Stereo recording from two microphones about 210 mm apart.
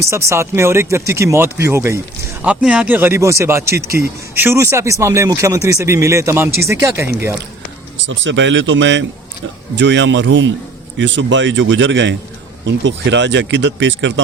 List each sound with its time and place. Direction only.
0.0 s speech: 15° right (ahead or behind)
8.0 s speech: 60° right (ahead or behind)